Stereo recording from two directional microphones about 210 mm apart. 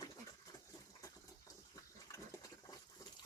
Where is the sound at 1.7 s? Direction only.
15° left (ahead or behind).